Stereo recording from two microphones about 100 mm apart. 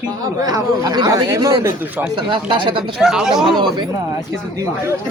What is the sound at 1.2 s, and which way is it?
Speech, 35° right (ahead or behind).